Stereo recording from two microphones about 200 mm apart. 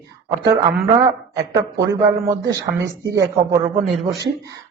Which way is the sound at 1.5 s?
15° right (ahead or behind).